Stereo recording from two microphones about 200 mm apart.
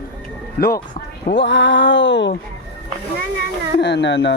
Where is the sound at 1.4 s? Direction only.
65° left (ahead or behind).